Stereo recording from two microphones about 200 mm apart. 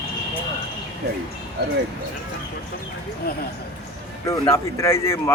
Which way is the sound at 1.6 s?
55° right (ahead or behind).